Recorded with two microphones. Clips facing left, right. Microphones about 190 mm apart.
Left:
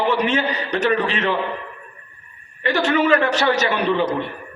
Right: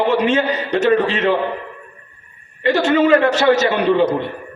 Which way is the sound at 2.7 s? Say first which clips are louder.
Right 4 dB; 25° right (ahead or behind).